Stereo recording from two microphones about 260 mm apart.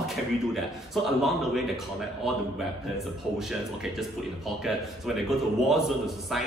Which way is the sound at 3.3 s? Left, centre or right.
Centre.